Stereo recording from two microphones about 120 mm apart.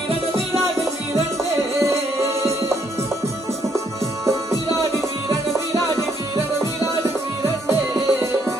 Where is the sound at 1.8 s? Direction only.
25° right (ahead or behind).